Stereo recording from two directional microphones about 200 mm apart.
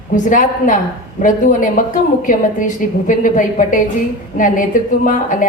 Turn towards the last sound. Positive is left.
turn(degrees=40)  # may be behind; listen again after turning